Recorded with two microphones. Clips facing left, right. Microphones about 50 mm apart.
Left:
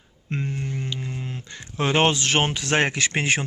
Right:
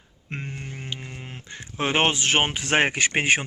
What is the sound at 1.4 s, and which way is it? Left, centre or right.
Speech, centre.